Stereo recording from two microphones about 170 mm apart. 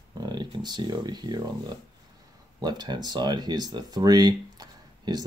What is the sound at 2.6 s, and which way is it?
Speech, 25° right (ahead or behind).